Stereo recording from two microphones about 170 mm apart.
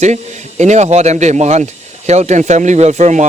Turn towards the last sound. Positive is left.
turn(degrees=-45)  # may be behind; listen again after turning